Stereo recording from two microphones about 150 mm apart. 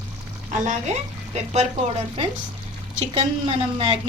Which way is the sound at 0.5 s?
50° right (ahead or behind).